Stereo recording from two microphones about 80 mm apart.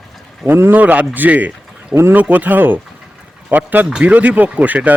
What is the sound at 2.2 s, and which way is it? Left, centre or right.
Speech, centre.